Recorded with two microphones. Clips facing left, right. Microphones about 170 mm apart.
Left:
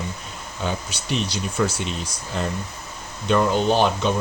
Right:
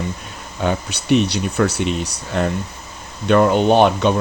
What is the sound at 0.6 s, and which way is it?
Speech, 60° right (ahead or behind).